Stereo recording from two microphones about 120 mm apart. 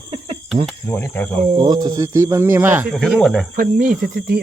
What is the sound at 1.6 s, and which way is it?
Speech, 35° right (ahead or behind).